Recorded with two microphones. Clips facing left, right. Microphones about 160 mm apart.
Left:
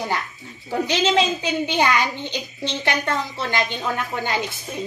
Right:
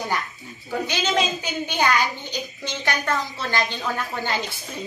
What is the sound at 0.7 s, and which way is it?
A child's voice, 30° left (ahead or behind).